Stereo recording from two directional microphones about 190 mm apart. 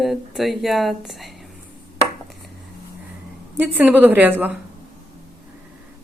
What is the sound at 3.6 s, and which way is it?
A woman's voice, 10° right (ahead or behind).